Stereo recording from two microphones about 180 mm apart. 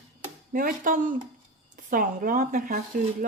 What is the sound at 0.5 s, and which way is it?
Speech, 50° right (ahead or behind).